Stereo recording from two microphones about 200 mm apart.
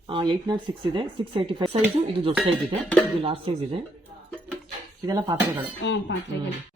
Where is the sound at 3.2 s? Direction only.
25° right (ahead or behind).